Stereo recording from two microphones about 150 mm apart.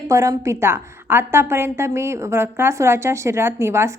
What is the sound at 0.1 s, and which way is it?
A woman's voice, 20° right (ahead or behind).